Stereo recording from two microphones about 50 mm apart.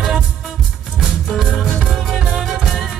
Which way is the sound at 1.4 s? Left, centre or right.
Centre.